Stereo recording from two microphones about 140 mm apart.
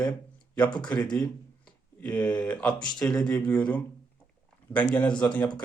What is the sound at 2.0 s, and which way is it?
Speech, 10° left (ahead or behind).